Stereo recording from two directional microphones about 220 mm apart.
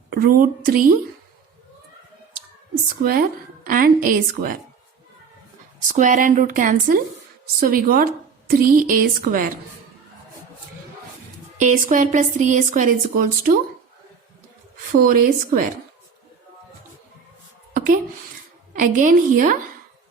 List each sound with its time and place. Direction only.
0.1 s speech: 40° right (ahead or behind)
3.0 s speech: 40° right (ahead or behind)
5.9 s speech: 35° right (ahead or behind)
11.5 s speech: 35° right (ahead or behind)
15.0 s speech: 40° right (ahead or behind)
17.7 s a sound: 40° right (ahead or behind)
18.8 s speech: 35° right (ahead or behind)